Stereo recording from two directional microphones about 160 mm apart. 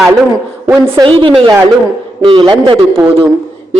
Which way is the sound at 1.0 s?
30° right (ahead or behind).